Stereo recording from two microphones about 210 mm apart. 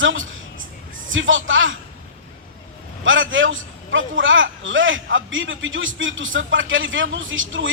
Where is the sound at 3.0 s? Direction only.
65° right (ahead or behind).